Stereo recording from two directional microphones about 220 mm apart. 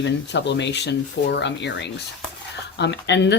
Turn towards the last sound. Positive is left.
turn(degrees=50)  # may be behind; listen again after turning